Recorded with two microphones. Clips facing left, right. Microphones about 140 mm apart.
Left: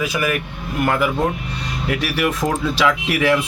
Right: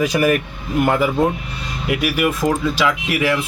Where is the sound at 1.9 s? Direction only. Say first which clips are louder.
Right 2 dB; 10° right (ahead or behind).